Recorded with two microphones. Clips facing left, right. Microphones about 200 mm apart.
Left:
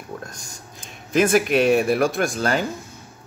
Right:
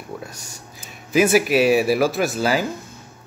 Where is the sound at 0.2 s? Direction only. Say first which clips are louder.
Right 1 dB; 5° right (ahead or behind).